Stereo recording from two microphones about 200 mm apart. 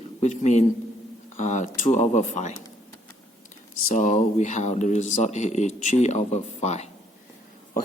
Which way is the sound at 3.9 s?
40° left (ahead or behind).